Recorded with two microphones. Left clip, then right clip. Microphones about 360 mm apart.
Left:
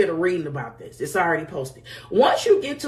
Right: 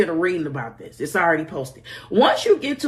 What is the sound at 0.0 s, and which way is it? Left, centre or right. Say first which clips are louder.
Speech: right 1 dB; right.